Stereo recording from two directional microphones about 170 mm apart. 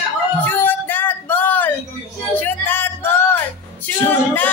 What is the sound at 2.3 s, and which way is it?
Music, 10° left (ahead or behind).